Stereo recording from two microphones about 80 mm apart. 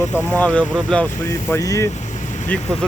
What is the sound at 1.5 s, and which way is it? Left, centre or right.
Speech, left.